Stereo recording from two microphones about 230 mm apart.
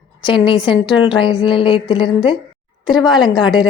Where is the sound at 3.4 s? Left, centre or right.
Centre.